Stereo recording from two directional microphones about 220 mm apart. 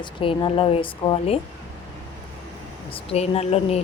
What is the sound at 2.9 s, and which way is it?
Speech, 25° left (ahead or behind).